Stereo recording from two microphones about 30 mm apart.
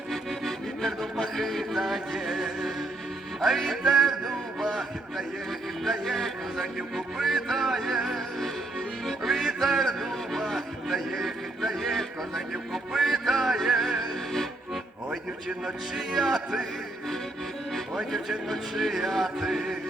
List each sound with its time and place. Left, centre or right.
0.1 s accordion: centre
1.2 s music: centre
1.7 s music: centre
10.4 s a sound: centre
11.7 s music: centre
15.1 s a man's voice: centre
16.2 s music: centre
18.7 s music: centre